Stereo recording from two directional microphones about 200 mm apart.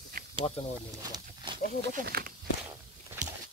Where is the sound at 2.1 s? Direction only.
50° right (ahead or behind).